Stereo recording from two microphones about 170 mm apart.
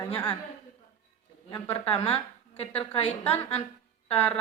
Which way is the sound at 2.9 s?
35° left (ahead or behind).